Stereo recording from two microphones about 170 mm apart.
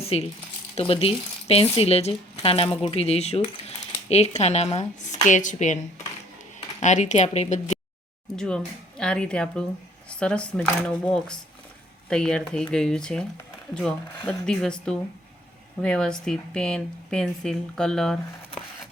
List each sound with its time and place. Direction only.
0.0 s speech: 35° left (ahead or behind)
8.4 s speech: 5° left (ahead or behind)
14.3 s speech: 5° left (ahead or behind)